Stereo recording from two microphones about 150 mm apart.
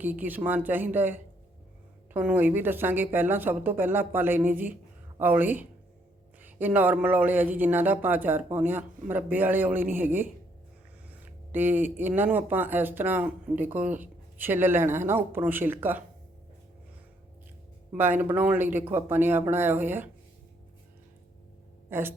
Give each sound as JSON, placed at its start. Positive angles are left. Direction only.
{"t": 0.0, "sound": "a man's voice", "side_deg": -10}
{"t": 17.9, "sound": "a man's voice", "side_deg": -15}
{"t": 21.8, "sound": "speech", "side_deg": -15}